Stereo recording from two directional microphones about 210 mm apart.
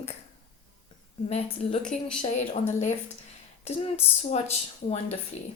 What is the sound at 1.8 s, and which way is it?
Speech, 5° left (ahead or behind).